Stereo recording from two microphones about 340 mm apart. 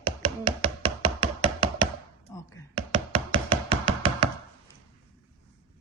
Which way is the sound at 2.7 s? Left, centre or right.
Centre.